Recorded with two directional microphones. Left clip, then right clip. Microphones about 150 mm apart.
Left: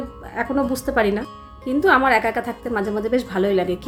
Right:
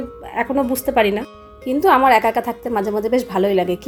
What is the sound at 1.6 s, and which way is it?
A woman's voice, 25° right (ahead or behind).